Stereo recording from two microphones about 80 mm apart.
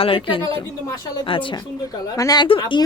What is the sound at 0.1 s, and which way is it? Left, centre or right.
Speech, left.